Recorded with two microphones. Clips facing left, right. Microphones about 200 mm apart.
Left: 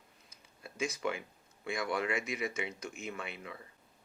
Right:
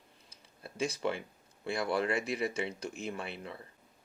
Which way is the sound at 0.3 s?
30° right (ahead or behind).